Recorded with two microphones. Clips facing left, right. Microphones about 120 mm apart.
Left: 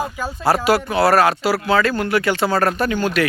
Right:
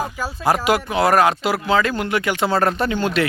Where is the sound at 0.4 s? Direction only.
15° right (ahead or behind).